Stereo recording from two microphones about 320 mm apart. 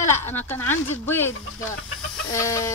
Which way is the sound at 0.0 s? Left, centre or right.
Centre.